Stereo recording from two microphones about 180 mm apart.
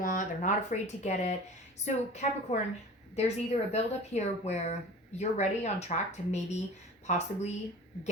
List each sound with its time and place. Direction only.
0.0 s speech: 45° left (ahead or behind)